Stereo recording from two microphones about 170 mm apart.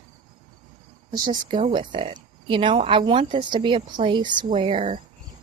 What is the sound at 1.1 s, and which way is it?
Speech, 25° right (ahead or behind).